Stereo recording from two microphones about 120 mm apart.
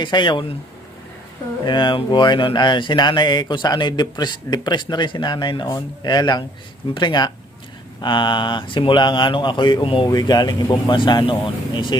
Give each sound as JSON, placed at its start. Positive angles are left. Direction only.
{"t": 0.0, "sound": "speech", "side_deg": 40}
{"t": 1.6, "sound": "speech", "side_deg": 40}
{"t": 10.1, "sound": "speech", "side_deg": 35}